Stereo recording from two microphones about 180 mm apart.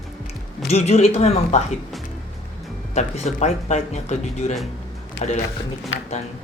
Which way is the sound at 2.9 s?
40° left (ahead or behind).